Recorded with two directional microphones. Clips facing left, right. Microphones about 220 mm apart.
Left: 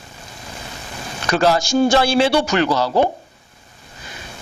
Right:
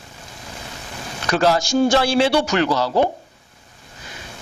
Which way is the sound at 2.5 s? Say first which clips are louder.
Left 1 dB; 25° left (ahead or behind).